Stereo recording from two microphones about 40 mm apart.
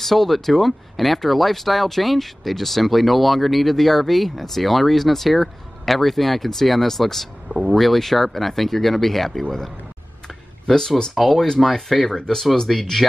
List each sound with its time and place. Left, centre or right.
0.0 s speech: centre
10.2 s a sound: centre
11.3 s speech: centre
11.6 s speech: centre
12.1 s speech: centre
12.7 s speech: centre